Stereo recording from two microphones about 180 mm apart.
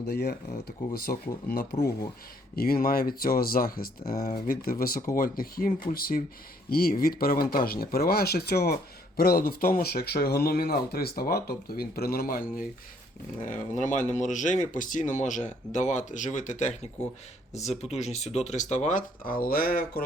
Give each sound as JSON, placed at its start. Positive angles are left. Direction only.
{"t": 0.1, "sound": "speech", "side_deg": 60}